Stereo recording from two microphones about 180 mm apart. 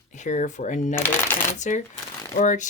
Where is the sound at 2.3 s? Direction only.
45° left (ahead or behind).